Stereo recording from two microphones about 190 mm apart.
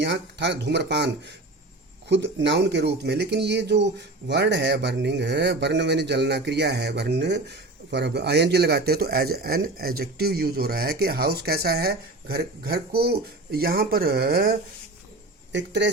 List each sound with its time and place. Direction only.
0.0 s speech: 65° right (ahead or behind)
15.5 s speech: 70° right (ahead or behind)